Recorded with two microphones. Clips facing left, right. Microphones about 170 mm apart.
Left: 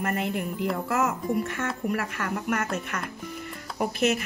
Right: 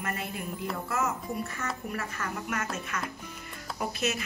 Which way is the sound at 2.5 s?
55° left (ahead or behind).